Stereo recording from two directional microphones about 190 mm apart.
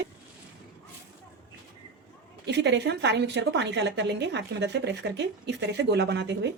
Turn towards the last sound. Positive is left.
turn(degrees=-65)  # may be behind; listen again after turning